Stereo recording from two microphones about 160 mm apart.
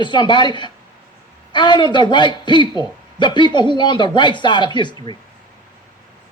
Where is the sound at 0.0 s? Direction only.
30° left (ahead or behind).